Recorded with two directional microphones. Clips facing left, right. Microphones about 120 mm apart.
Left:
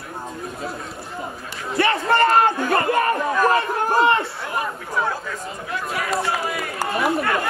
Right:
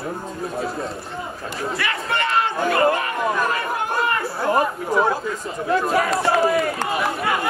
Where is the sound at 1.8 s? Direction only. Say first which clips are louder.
Left 10 dB; 30° left (ahead or behind).